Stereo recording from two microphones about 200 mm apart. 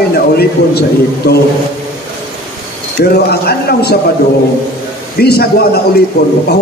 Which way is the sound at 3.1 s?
50° left (ahead or behind).